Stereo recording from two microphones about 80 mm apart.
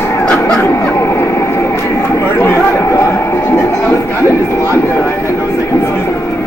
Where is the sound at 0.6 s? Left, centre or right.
Left.